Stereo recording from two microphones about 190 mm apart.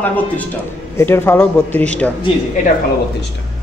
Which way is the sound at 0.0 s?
10° left (ahead or behind).